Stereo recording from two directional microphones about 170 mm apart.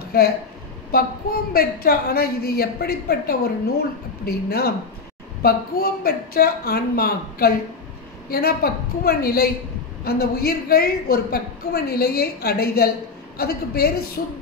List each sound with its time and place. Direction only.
0.1 s a woman's voice: 65° left (ahead or behind)
4.5 s a woman's voice: 65° left (ahead or behind)
14.2 s a sound: 70° left (ahead or behind)